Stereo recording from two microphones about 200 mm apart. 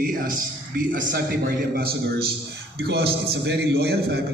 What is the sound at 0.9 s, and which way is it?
A man's voice, 50° right (ahead or behind).